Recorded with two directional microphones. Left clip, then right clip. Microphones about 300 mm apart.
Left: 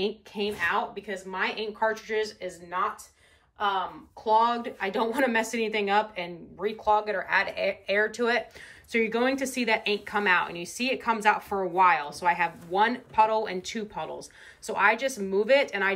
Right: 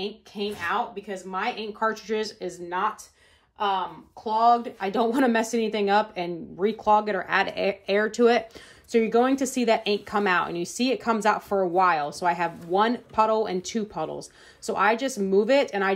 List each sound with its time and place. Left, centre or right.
0.0 s a woman's voice: centre
4.2 s a woman's voice: centre